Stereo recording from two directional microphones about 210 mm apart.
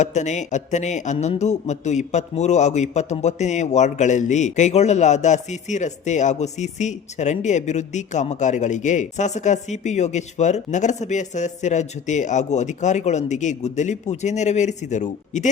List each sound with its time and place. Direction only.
0.0 s a man's voice: 35° left (ahead or behind)